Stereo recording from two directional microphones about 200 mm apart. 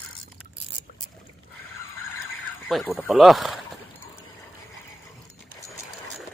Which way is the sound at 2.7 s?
Centre (ahead or behind).